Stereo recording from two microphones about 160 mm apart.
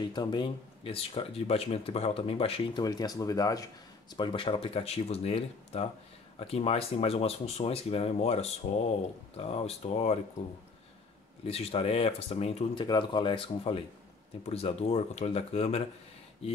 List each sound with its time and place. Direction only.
0.1 s speech: 25° left (ahead or behind)
11.4 s speech: 40° left (ahead or behind)
12.8 s speech: 30° left (ahead or behind)